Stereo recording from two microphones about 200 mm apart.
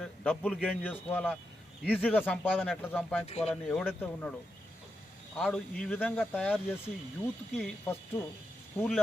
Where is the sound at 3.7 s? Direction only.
5° left (ahead or behind).